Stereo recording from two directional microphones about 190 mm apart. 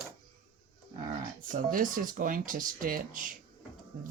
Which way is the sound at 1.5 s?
45° right (ahead or behind).